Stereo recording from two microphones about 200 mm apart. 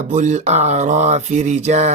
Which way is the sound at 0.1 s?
40° right (ahead or behind).